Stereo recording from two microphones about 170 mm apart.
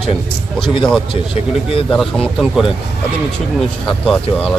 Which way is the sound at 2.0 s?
Centre (ahead or behind).